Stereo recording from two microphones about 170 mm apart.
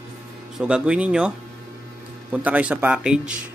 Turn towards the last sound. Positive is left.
turn(degrees=-5)  # may be behind; listen again after turning